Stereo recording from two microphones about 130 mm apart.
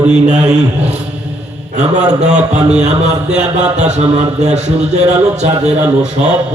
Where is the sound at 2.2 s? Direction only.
60° right (ahead or behind).